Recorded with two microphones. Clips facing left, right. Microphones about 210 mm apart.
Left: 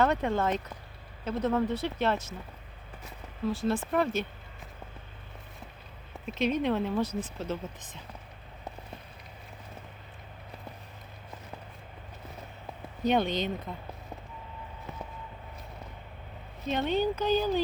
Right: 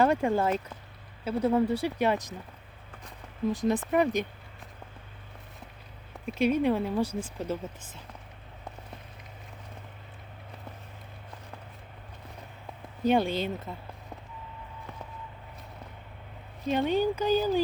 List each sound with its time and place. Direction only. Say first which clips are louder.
0.0 s speech: right 2 dB; 10° right (ahead or behind)
3.4 s speech: right 2 dB; 20° right (ahead or behind)
6.3 s speech: right 3 dB; 10° right (ahead or behind)
7.1 s speech: even; 30° right (ahead or behind)
7.3 s speech: right 2 dB; 10° right (ahead or behind)
13.0 s speech: right 2 dB; 10° right (ahead or behind)
16.6 s speech: right 2 dB; 10° right (ahead or behind)